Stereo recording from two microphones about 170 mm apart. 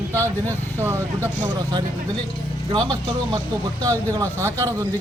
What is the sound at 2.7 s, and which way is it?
A man's voice, 25° right (ahead or behind).